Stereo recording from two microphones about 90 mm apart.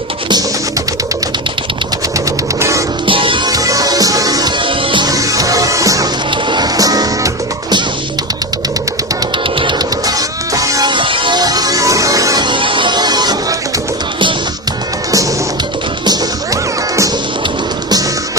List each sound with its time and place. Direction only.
2.6 s music: 35° right (ahead or behind)
3.1 s music: 70° right (ahead or behind)
3.5 s music: 40° right (ahead or behind)
4.6 s music: 70° right (ahead or behind)
5.0 s music: 40° right (ahead or behind)
9.6 s music: 65° right (ahead or behind)
10.1 s music: 40° right (ahead or behind)
10.8 s music: 65° right (ahead or behind); by 12.5 s 40° right (ahead or behind)
12.5 s music: 70° right (ahead or behind); by 13.6 s 50° right (ahead or behind)